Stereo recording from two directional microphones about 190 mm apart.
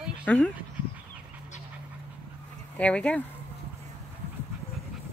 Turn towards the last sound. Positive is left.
turn(degrees=5)  # may be behind; listen again after turning